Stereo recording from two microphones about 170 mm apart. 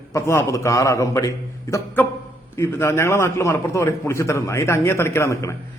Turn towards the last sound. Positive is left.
turn(degrees=15)  # may be behind; listen again after turning